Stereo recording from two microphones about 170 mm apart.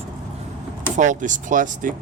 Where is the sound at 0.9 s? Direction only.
50° right (ahead or behind).